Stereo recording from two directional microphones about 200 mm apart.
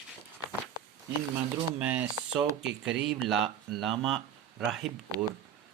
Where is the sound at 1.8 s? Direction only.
5° right (ahead or behind).